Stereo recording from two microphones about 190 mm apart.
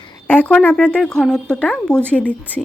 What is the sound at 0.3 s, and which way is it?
A woman's voice, 10° left (ahead or behind).